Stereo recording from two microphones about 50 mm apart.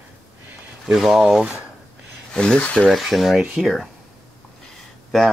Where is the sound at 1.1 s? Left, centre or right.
Centre.